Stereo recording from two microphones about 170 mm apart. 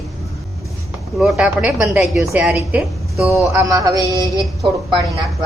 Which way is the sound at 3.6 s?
20° right (ahead or behind).